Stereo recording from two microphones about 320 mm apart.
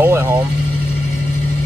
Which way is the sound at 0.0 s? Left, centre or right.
Centre.